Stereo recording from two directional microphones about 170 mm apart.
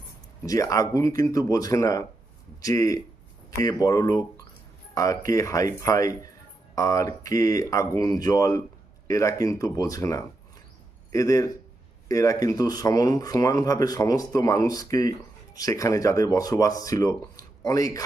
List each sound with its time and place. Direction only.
0.4 s speech: 20° left (ahead or behind)